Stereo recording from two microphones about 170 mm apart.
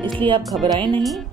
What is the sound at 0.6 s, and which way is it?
Speech, 25° right (ahead or behind).